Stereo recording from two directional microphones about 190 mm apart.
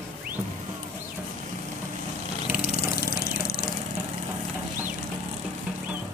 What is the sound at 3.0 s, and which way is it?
Vehicle, 55° left (ahead or behind).